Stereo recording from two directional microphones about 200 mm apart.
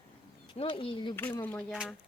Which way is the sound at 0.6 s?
25° left (ahead or behind).